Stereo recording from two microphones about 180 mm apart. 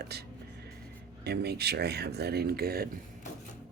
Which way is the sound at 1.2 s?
65° right (ahead or behind).